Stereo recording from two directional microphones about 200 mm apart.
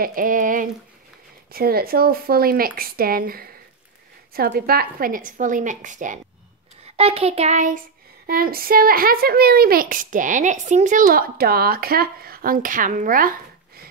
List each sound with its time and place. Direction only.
0.0 s child singing: 45° right (ahead or behind)
1.5 s speech: 50° right (ahead or behind)
7.0 s child singing: 30° right (ahead or behind)
8.3 s speech: 50° right (ahead or behind)